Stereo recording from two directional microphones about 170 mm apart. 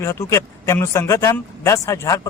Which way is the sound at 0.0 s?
15° left (ahead or behind).